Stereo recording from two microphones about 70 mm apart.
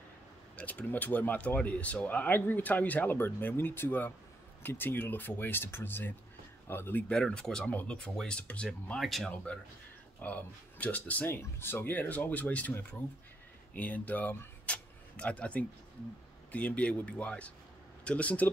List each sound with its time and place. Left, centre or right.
0.6 s speech: left
7.1 s speech: centre
9.0 s speech: centre
10.2 s speech: left
13.7 s speech: left
14.7 s a sound: centre
16.5 s speech: centre